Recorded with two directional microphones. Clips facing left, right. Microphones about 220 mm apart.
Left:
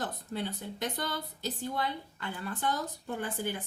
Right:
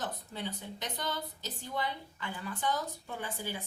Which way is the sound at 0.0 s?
50° left (ahead or behind).